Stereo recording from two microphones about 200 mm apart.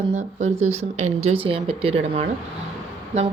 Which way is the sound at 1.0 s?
90° right.